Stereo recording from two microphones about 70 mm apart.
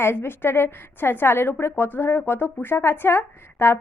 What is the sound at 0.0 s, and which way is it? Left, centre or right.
A woman's voice, left.